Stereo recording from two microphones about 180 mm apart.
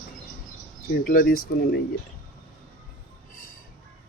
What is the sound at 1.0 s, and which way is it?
Speech, 50° left (ahead or behind).